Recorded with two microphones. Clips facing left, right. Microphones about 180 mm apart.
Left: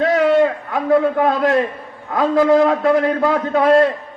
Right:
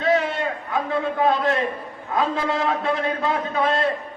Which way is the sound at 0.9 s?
70° left (ahead or behind).